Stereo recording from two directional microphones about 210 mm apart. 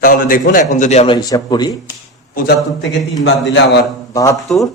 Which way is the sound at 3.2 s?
55° left (ahead or behind).